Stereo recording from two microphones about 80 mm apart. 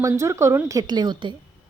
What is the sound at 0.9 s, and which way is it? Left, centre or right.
Speech, right.